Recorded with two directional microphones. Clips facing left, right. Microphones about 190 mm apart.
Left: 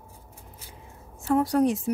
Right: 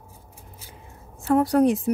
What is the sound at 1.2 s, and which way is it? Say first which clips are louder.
Speech: right 3 dB; 60° right (ahead or behind).